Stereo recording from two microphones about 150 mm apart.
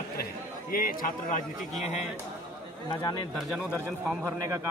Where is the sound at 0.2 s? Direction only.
75° left (ahead or behind).